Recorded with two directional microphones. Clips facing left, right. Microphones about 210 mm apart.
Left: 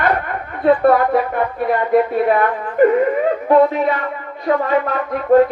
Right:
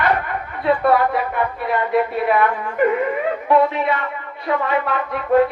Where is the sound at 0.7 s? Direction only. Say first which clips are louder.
Left 4 dB; 50° left (ahead or behind).